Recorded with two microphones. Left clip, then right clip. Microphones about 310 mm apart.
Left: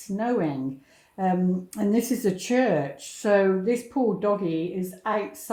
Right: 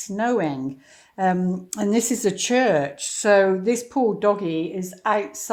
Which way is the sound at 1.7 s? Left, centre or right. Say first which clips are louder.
Right 4 dB; right.